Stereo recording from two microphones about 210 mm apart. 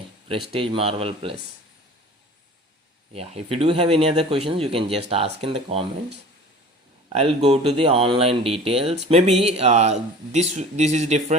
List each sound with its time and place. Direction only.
0.5 s a man's voice: 25° right (ahead or behind)
3.1 s a man's voice: 30° right (ahead or behind)
7.1 s a man's voice: 30° right (ahead or behind)